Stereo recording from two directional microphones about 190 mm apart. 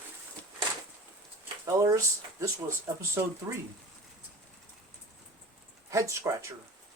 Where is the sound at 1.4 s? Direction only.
20° right (ahead or behind).